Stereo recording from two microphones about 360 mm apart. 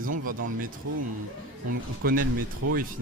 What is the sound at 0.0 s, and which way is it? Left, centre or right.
Speech, right.